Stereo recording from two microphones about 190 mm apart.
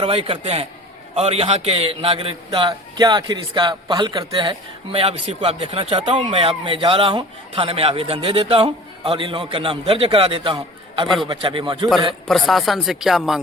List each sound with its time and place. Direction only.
0.0 s a man's voice: 30° right (ahead or behind)
12.3 s speech: centre (ahead or behind)